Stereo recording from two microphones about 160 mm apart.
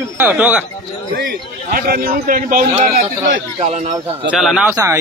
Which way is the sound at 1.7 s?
65° right (ahead or behind).